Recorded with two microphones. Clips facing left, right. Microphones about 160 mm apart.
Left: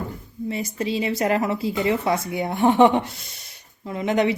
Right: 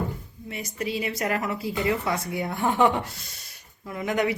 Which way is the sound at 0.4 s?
30° left (ahead or behind).